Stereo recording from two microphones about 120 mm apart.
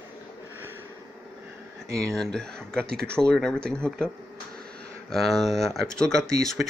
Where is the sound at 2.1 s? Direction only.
5° left (ahead or behind).